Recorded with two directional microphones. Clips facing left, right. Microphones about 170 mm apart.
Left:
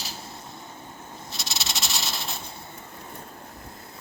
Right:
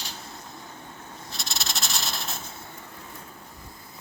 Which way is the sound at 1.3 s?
Centre (ahead or behind).